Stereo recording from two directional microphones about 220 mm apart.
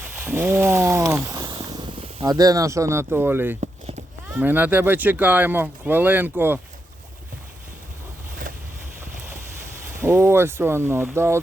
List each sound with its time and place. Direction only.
0.0 s speech: 10° right (ahead or behind)
3.6 s a sound: 30° right (ahead or behind)
4.4 s speech: 10° right (ahead or behind)
10.0 s speech: 10° right (ahead or behind)